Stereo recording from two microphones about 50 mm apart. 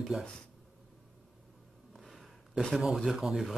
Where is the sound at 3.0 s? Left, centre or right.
Centre.